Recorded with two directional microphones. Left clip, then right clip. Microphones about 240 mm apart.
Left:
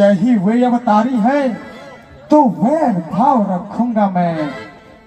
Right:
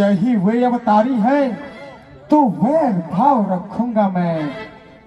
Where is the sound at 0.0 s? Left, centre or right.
Right.